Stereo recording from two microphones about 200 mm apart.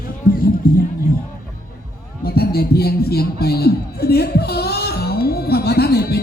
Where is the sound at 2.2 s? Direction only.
50° left (ahead or behind).